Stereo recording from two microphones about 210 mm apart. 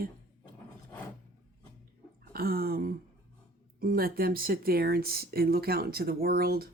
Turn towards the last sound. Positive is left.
turn(degrees=-45)  # may be behind; listen again after turning